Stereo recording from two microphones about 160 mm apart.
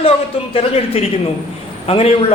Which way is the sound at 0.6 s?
40° left (ahead or behind).